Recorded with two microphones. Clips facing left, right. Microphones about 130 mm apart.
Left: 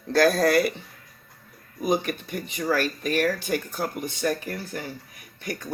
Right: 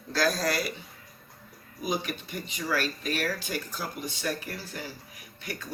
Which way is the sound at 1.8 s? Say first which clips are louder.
Left 7 dB; 50° left (ahead or behind).